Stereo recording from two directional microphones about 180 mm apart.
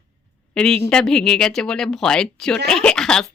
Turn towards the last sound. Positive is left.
turn(degrees=5)  # may be behind; listen again after turning